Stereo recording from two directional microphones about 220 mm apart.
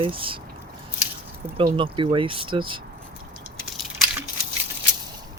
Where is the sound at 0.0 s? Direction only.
25° right (ahead or behind).